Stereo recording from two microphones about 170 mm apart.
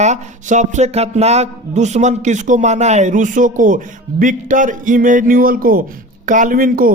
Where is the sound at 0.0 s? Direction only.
45° right (ahead or behind).